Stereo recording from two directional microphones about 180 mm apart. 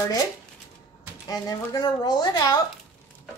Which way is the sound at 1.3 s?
20° left (ahead or behind).